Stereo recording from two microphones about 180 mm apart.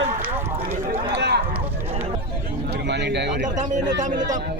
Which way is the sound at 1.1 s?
70° right (ahead or behind).